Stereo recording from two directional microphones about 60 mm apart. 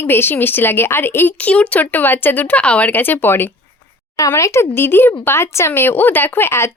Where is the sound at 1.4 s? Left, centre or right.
Left.